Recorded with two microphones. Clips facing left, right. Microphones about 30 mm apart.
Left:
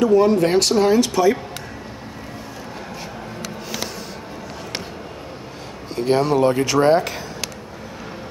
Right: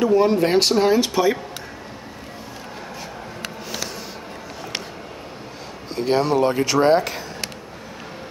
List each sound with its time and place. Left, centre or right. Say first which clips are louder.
0.0 s speech: left 2 dB; centre
5.9 s speech: left 1 dB; centre